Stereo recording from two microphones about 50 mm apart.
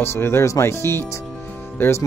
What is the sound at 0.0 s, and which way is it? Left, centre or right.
Speech, left.